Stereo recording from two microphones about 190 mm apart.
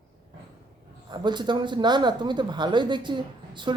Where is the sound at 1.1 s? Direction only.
25° right (ahead or behind).